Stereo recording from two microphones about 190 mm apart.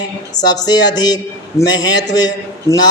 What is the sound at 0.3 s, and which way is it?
A man's voice, 20° left (ahead or behind).